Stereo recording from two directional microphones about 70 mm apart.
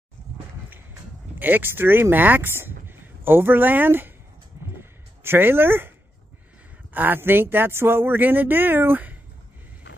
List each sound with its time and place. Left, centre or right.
1.4 s speech: right
4.7 s a sound: right
6.9 s speech: right